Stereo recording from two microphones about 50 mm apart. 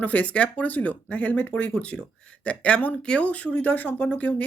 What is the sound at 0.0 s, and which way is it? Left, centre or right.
Speech, left.